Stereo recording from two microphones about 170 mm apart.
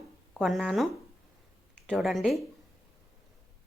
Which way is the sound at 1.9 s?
Centre (ahead or behind).